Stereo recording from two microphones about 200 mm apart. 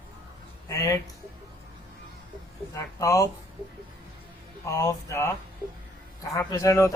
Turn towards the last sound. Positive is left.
turn(degrees=15)  # may be behind; listen again after turning